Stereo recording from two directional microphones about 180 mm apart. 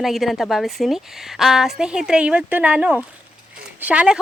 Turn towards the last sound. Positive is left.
turn(degrees=-5)  # may be behind; listen again after turning